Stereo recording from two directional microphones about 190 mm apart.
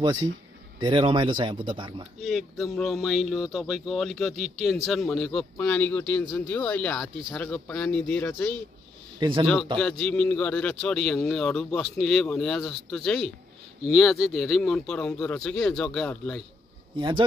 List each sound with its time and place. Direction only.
0.0 s speech: 20° right (ahead or behind)
2.1 s speech: centre (ahead or behind)
9.2 s speech: 25° right (ahead or behind)
9.8 s speech: 5° left (ahead or behind)